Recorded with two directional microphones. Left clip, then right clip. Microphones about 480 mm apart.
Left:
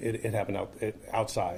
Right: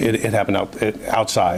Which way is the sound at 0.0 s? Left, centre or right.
Right.